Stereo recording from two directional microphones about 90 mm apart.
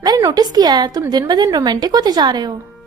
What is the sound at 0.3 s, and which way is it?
A woman's voice, 45° right (ahead or behind).